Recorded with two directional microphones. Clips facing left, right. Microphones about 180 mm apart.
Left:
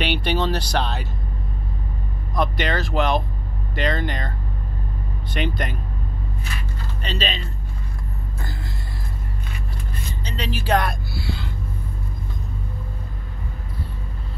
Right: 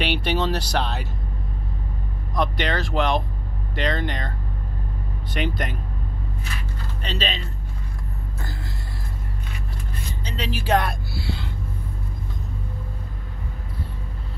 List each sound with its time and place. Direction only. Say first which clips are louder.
0.0 s speech: left 1 dB; centre (ahead or behind)
2.3 s speech: left 1 dB; 5° left (ahead or behind)
5.4 s speech: left 1 dB; 5° right (ahead or behind)
7.0 s speech: left 1 dB; centre (ahead or behind)
10.2 s speech: left 1 dB; 5° right (ahead or behind)
10.6 s speech: even; 25° right (ahead or behind)